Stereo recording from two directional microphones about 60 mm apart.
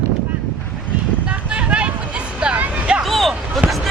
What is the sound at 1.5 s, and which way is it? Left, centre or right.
Vehicle, centre.